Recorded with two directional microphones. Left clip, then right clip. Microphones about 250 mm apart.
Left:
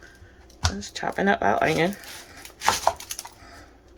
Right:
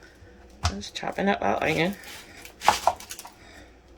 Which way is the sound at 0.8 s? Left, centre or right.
Centre.